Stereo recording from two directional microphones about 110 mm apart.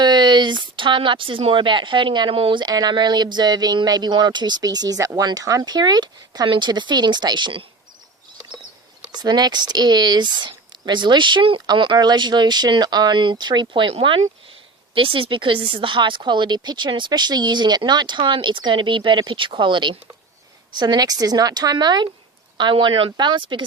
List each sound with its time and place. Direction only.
0.0 s speech: 40° right (ahead or behind)
9.1 s speech: 40° right (ahead or behind)
14.9 s speech: 55° right (ahead or behind)